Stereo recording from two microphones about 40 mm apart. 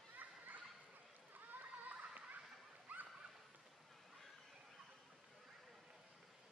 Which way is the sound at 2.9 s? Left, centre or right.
Right.